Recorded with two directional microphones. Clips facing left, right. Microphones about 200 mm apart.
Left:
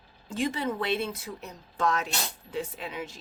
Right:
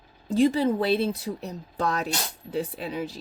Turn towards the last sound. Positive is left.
turn(degrees=-35)  # may be behind; listen again after turning